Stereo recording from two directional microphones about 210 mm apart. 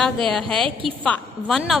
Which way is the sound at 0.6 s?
25° right (ahead or behind).